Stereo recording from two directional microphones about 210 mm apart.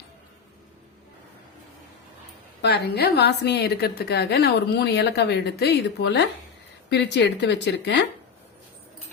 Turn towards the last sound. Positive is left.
turn(degrees=55)  # may be behind; listen again after turning